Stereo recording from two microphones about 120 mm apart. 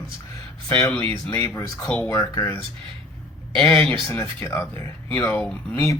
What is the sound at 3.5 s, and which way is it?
Speech, 5° left (ahead or behind).